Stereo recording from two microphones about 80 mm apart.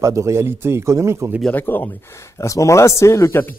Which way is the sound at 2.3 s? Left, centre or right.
Left.